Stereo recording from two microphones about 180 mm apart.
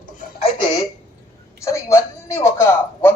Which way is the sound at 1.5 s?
15° left (ahead or behind).